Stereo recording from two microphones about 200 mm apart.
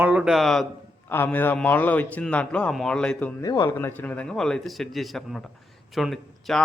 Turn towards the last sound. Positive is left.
turn(degrees=0)  # may be behind; listen again after turning